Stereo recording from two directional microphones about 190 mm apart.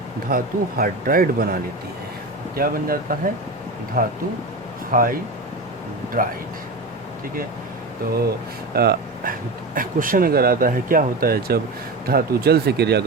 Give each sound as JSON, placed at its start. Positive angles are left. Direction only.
{"t": 0.3, "sound": "speech", "side_deg": -50}
{"t": 2.6, "sound": "speech", "side_deg": -50}
{"t": 6.2, "sound": "speech", "side_deg": -45}
{"t": 8.7, "sound": "speech", "side_deg": -55}